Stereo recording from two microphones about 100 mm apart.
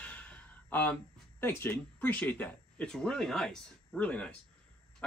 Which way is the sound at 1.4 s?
25° left (ahead or behind).